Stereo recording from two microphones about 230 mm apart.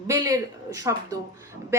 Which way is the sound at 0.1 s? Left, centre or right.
Centre.